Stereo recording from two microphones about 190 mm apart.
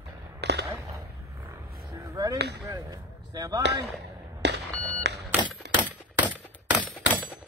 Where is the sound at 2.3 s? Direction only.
60° right (ahead or behind).